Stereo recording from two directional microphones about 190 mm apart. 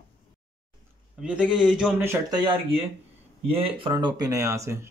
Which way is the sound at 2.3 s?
25° right (ahead or behind).